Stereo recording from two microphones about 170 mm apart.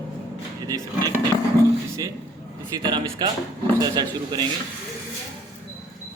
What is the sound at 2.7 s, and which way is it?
Speech, 25° right (ahead or behind).